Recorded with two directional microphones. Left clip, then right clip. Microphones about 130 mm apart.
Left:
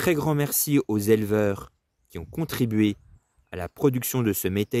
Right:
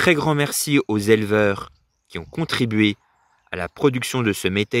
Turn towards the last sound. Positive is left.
turn(degrees=10)  # may be behind; listen again after turning